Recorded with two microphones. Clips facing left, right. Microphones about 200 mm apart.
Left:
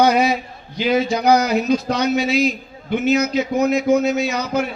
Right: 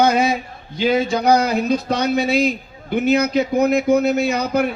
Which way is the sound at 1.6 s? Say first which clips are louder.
Left 1 dB; 55° right (ahead or behind).